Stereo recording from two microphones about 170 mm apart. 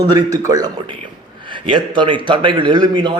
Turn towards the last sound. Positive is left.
turn(degrees=-25)  # may be behind; listen again after turning